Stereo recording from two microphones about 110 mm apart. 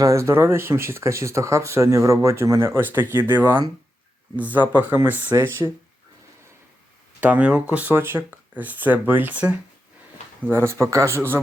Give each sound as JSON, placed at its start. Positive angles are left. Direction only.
{"t": 0.0, "sound": "speech", "side_deg": -30}
{"t": 7.2, "sound": "speech", "side_deg": -15}